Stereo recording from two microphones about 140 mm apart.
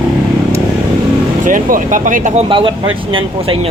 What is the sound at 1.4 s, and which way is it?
Speech, 75° right (ahead or behind).